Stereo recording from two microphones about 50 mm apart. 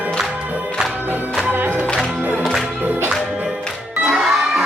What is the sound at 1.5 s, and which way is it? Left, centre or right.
Music, right.